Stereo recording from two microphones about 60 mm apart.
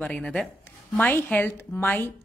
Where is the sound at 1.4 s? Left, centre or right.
Left.